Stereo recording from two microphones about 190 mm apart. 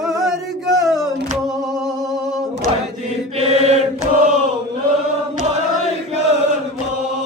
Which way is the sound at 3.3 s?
35° right (ahead or behind).